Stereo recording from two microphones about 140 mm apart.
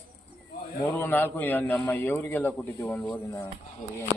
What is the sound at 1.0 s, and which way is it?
A man's voice, 15° left (ahead or behind).